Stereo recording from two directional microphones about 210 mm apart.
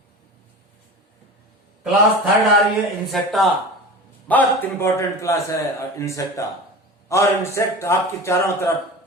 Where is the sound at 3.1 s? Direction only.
Centre (ahead or behind).